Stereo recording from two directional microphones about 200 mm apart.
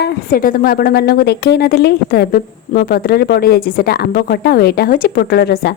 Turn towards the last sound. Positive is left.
turn(degrees=50)  # may be behind; listen again after turning